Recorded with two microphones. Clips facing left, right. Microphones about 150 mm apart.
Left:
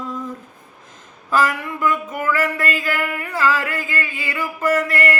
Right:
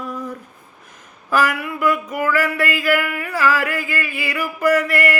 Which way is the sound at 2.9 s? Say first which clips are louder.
Right 2 dB; 25° left (ahead or behind).